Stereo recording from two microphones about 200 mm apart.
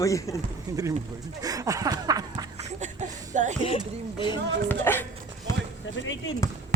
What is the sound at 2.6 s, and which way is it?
Speech, 35° right (ahead or behind).